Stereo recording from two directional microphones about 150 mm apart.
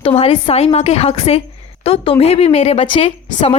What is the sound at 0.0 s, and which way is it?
A woman's voice, 40° left (ahead or behind).